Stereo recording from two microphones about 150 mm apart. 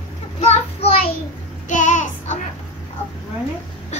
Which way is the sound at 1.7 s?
55° left (ahead or behind).